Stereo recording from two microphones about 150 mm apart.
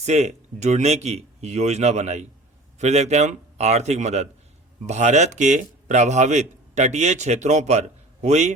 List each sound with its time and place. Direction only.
0.0 s a man's voice: 50° right (ahead or behind)